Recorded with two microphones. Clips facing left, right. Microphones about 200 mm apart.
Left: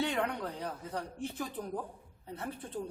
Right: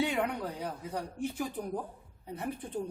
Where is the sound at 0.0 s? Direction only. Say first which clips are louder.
Right 2 dB; 10° right (ahead or behind).